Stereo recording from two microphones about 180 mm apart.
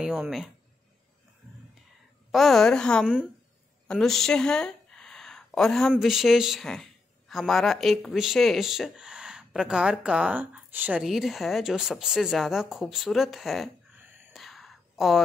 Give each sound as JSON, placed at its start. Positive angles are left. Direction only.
{"t": 0.0, "sound": "speech", "side_deg": -5}
{"t": 2.3, "sound": "speech", "side_deg": 0}
{"t": 14.3, "sound": "a sound", "side_deg": 0}